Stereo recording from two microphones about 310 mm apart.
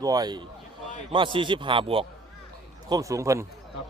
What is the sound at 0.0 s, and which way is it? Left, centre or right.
Speech, centre.